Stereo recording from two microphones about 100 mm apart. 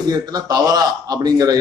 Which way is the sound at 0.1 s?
40° right (ahead or behind).